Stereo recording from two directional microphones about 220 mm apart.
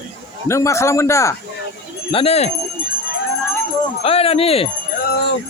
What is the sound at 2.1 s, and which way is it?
Speech, 25° left (ahead or behind).